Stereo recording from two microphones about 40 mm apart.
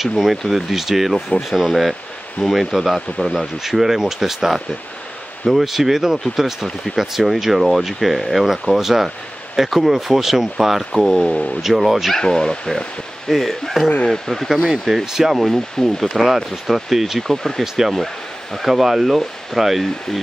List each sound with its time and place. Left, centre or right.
0.0 s speech: centre
12.2 s speech: centre
13.3 s speech: centre
14.6 s speech: centre
15.5 s speech: centre
17.2 s speech: centre